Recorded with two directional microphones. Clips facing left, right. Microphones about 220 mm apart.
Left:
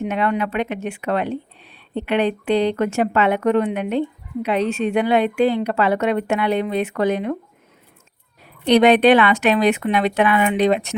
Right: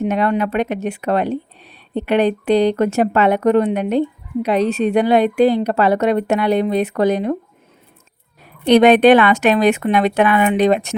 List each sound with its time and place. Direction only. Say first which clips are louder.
0.0 s a woman's voice: right 4 dB; 40° right (ahead or behind)
8.6 s a woman's voice: right 3 dB; 50° right (ahead or behind)